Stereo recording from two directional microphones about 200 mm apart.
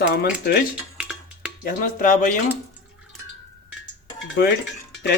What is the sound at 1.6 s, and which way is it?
Speech, 45° left (ahead or behind).